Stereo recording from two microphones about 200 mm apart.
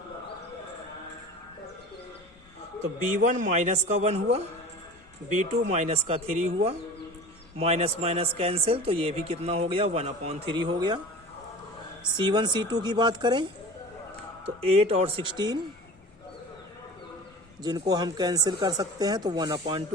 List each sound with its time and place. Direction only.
3.2 s speech: 40° right (ahead or behind)
5.5 s a man's voice: 35° right (ahead or behind)
12.0 s a man's voice: 20° right (ahead or behind)
14.6 s a man's voice: 30° right (ahead or behind)
17.6 s a man's voice: 20° right (ahead or behind)